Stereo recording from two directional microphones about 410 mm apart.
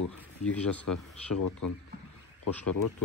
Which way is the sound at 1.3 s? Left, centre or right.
Left.